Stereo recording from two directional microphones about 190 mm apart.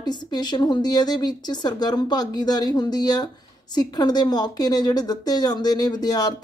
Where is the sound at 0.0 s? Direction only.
20° left (ahead or behind).